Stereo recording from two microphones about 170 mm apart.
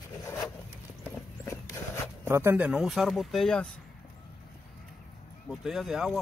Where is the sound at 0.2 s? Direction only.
20° left (ahead or behind).